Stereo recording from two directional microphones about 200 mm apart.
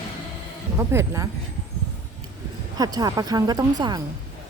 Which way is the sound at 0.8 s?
15° right (ahead or behind).